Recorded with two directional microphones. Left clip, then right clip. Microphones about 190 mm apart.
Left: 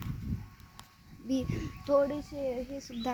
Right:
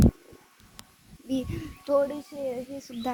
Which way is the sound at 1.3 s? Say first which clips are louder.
Right 2 dB; 45° right (ahead or behind).